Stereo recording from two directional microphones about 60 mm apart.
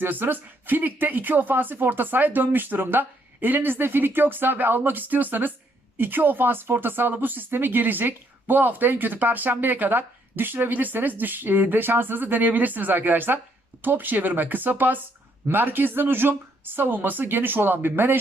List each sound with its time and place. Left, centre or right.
0.0 s speech: right